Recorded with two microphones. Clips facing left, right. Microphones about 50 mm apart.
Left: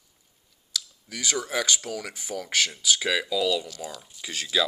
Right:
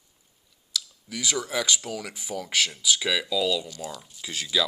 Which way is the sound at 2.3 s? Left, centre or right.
Right.